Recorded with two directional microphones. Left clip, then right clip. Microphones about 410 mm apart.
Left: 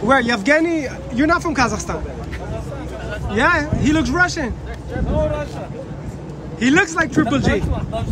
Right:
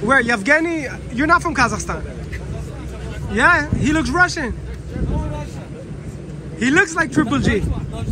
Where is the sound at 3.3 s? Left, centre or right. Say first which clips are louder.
Right 2 dB; centre.